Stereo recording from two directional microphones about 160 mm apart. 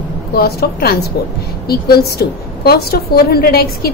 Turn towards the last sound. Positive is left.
turn(degrees=75)  # may be behind; listen again after turning